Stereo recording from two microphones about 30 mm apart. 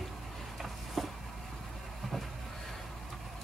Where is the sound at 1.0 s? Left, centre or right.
Centre.